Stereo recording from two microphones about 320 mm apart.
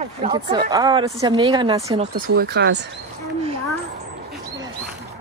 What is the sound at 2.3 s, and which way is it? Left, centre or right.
Speech, right.